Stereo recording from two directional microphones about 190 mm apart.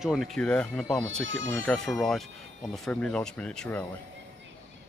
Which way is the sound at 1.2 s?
85° right.